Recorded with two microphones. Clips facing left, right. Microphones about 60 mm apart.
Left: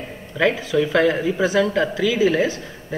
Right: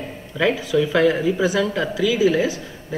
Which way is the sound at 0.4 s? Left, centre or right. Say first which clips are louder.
Even; left.